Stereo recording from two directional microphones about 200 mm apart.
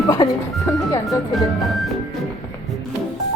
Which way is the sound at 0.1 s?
15° left (ahead or behind).